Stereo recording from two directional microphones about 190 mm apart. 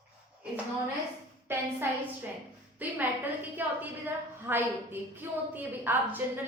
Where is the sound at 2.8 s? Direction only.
10° right (ahead or behind).